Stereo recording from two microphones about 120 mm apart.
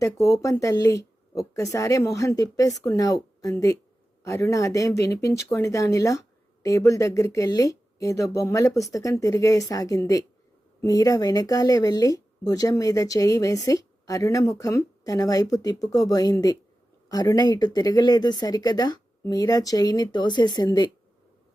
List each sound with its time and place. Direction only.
0.0 s speech: 25° left (ahead or behind)